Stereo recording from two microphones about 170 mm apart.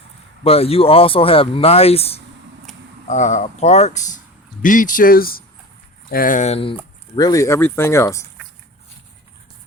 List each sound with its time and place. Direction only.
0.4 s speech: 35° left (ahead or behind)
7.2 s speech: 20° left (ahead or behind)